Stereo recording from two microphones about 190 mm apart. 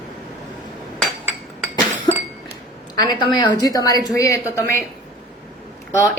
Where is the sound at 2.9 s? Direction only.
20° left (ahead or behind).